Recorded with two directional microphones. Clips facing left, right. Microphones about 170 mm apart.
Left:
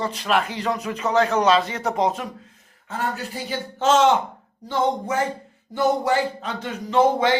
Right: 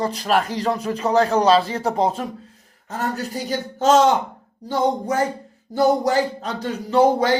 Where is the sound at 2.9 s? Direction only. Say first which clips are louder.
Right 2 dB; 40° right (ahead or behind).